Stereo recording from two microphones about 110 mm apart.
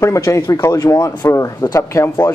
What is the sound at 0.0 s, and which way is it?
A man's voice, 25° left (ahead or behind).